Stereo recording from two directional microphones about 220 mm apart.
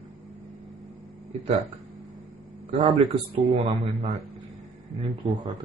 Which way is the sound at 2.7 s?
25° right (ahead or behind).